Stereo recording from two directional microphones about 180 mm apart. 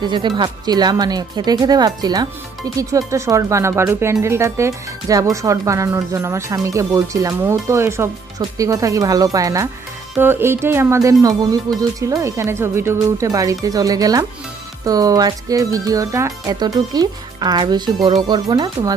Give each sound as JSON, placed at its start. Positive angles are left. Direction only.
{"t": 0.0, "sound": "speech", "side_deg": -25}